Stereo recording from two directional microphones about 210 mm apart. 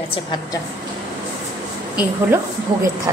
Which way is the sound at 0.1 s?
20° left (ahead or behind).